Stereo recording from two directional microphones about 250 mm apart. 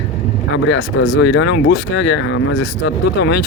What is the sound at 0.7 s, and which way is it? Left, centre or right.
Speech, left.